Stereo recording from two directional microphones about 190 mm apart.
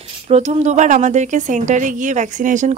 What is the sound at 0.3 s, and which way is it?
A woman's voice, 35° right (ahead or behind).